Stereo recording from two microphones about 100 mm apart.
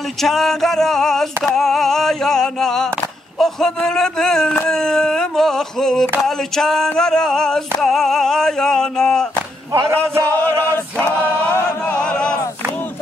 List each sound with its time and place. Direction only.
0.2 s speech: 5° left (ahead or behind)
9.7 s speech: 25° right (ahead or behind)
10.2 s chant: 15° left (ahead or behind)
11.1 s choir: 20° left (ahead or behind)
12.0 s a sound: 10° left (ahead or behind)